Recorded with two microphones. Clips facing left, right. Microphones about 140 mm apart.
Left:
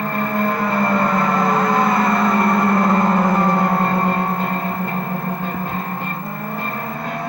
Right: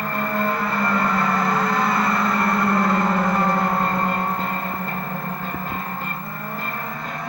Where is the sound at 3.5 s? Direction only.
25° left (ahead or behind).